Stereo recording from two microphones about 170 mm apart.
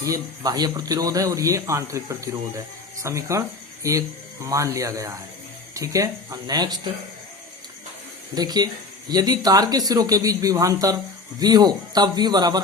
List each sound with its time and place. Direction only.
0.0 s speech: 20° right (ahead or behind)
8.4 s speech: 25° right (ahead or behind)